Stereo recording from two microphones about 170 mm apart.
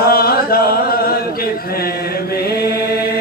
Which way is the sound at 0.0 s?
60° left (ahead or behind).